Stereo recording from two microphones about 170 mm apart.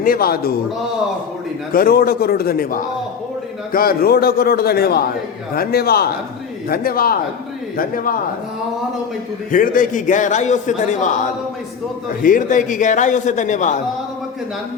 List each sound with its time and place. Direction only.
0.0 s a man's voice: 60° left (ahead or behind)
1.7 s a man's voice: 60° left (ahead or behind)
9.5 s a man's voice: 50° left (ahead or behind)
12.2 s a man's voice: 50° left (ahead or behind)